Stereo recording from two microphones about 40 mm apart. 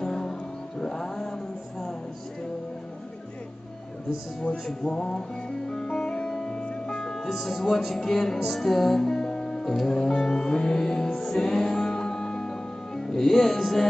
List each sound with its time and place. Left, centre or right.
0.0 s music: centre
4.6 s music: centre
7.0 s music: centre